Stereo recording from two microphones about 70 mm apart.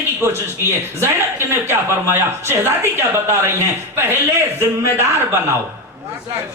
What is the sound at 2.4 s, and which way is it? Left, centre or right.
A man's voice, right.